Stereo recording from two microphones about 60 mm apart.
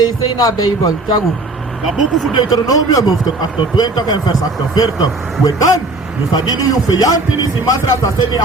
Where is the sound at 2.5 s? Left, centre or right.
Left.